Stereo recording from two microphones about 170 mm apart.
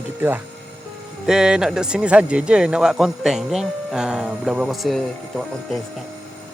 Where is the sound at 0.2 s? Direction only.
10° right (ahead or behind).